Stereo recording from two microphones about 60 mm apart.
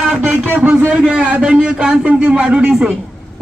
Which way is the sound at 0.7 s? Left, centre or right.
Right.